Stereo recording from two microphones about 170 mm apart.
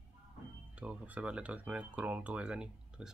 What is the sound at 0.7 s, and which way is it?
Speech, 5° right (ahead or behind).